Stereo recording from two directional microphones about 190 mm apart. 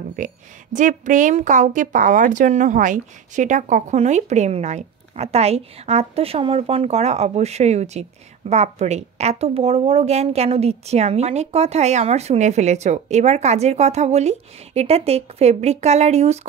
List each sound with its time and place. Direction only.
0.2 s a woman's voice: 40° right (ahead or behind)